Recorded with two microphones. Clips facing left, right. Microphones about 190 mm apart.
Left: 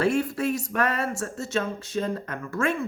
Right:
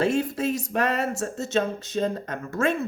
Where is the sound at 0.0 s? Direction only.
25° right (ahead or behind).